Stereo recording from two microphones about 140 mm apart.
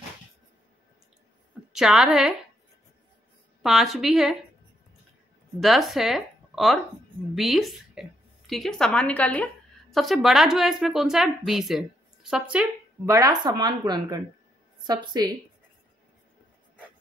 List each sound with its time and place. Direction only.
1.7 s a woman's voice: 5° right (ahead or behind)
3.6 s a woman's voice: centre (ahead or behind)
5.6 s a woman's voice: centre (ahead or behind)
13.0 s a woman's voice: 20° right (ahead or behind)